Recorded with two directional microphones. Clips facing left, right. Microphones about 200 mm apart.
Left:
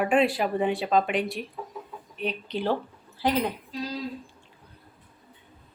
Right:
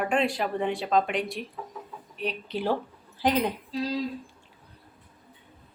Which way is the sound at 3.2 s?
15° right (ahead or behind).